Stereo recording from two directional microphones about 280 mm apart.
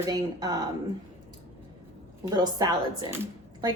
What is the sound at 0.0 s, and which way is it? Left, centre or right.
Speech, centre.